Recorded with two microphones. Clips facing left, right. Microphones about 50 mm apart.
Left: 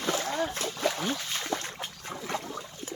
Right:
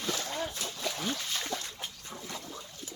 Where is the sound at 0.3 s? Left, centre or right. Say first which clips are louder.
Left 5 dB; left.